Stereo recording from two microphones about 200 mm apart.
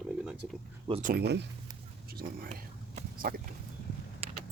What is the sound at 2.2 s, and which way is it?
Speech, 45° right (ahead or behind).